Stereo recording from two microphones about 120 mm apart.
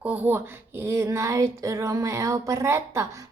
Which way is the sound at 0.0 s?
15° right (ahead or behind).